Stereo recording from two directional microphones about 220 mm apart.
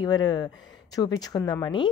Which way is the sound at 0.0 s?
20° left (ahead or behind).